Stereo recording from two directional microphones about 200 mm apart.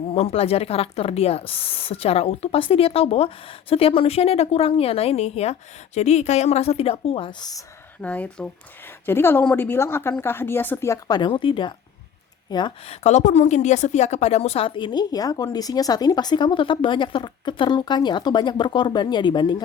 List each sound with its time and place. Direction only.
0.1 s speech: 30° left (ahead or behind)
8.0 s a woman's voice: 5° left (ahead or behind)